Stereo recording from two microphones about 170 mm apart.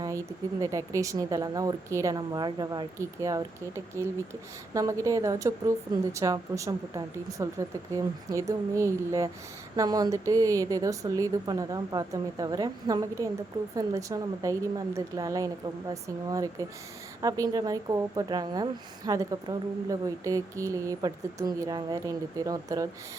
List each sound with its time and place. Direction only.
0.0 s speech: 20° right (ahead or behind)